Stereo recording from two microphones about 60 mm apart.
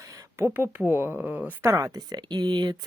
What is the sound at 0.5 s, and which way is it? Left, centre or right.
Speech, right.